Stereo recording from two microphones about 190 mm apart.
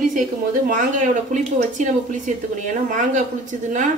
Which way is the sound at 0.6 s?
40° right (ahead or behind).